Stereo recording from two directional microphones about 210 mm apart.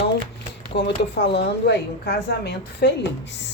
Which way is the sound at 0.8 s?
55° left (ahead or behind).